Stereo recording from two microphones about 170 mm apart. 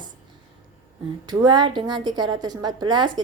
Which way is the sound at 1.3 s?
25° right (ahead or behind).